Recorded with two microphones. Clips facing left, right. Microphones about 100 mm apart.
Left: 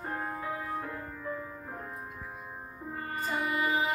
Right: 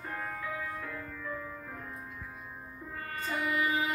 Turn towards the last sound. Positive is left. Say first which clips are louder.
# left 1 dB
turn(degrees=25)  # may be behind; listen again after turning